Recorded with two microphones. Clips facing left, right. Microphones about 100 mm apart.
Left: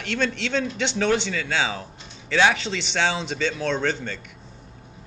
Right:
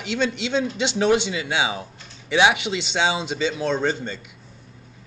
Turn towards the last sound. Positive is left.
turn(degrees=-10)  # may be behind; listen again after turning